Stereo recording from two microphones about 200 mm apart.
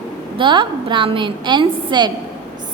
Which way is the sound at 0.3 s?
25° right (ahead or behind).